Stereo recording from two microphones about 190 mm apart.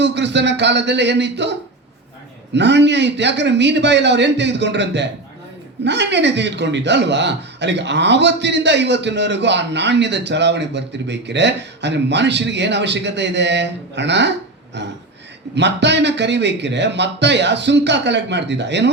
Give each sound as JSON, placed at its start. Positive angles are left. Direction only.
{"t": 0.0, "sound": "a man's voice", "side_deg": -65}